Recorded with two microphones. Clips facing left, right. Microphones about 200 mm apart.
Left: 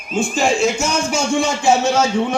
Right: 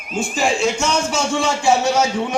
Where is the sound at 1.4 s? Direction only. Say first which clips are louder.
Right 1 dB; 25° left (ahead or behind).